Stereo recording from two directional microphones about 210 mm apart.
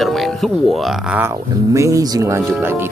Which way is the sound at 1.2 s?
15° right (ahead or behind).